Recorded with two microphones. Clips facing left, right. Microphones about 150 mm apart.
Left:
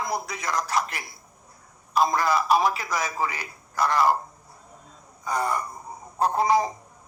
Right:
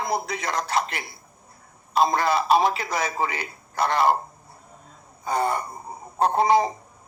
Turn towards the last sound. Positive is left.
turn(degrees=-25)  # may be behind; listen again after turning